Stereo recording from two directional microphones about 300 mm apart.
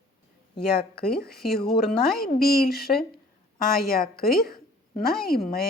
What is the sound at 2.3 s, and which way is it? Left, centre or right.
Speech, left.